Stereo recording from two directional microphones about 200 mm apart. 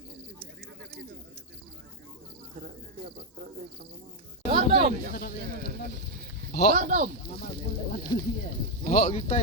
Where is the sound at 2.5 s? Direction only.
45° right (ahead or behind).